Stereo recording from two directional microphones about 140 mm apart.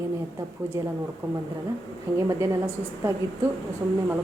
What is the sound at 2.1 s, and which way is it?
Speech, 20° right (ahead or behind).